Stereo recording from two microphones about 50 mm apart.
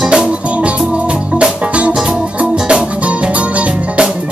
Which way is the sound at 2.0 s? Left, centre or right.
Centre.